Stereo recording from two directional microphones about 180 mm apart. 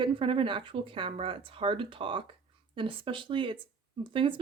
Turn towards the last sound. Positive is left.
turn(degrees=-30)  # may be behind; listen again after turning